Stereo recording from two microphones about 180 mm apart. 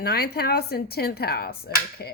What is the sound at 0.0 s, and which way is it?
Speech, 60° left (ahead or behind).